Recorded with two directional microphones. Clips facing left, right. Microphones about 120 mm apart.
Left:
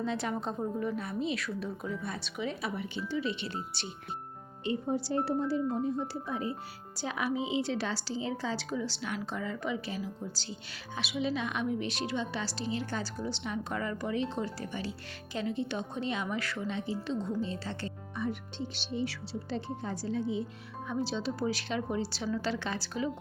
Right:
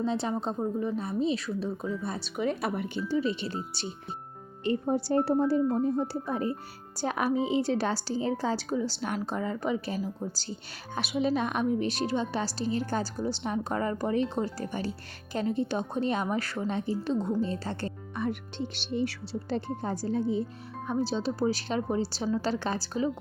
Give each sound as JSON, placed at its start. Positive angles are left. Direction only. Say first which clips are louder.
{"t": 0.0, "sound": "a woman's voice", "louder": "right 4 dB", "side_deg": -30}
{"t": 4.6, "sound": "a woman's voice", "louder": "right 4 dB", "side_deg": -55}
{"t": 18.2, "sound": "a woman's voice", "louder": "right 3 dB", "side_deg": -65}